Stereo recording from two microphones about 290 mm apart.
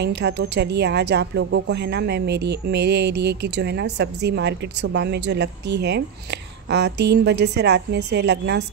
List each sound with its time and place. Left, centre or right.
0.0 s a woman's voice: right